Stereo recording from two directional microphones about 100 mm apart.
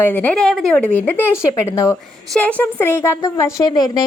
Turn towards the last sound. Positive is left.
turn(degrees=40)  # may be behind; listen again after turning